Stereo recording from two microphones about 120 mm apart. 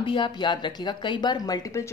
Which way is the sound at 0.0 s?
40° left (ahead or behind).